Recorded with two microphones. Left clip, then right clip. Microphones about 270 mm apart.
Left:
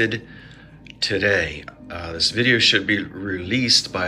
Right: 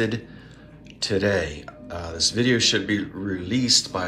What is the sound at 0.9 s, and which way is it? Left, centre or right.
Speech, centre.